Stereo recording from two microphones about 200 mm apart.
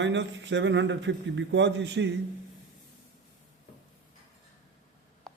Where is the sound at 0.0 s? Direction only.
65° right (ahead or behind).